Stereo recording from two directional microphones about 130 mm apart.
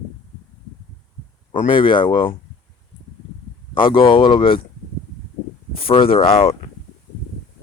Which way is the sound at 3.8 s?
40° left (ahead or behind).